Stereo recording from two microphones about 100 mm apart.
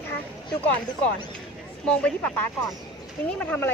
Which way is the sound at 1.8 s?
10° left (ahead or behind).